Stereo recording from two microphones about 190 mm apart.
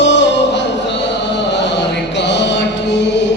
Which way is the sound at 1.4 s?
65° left (ahead or behind).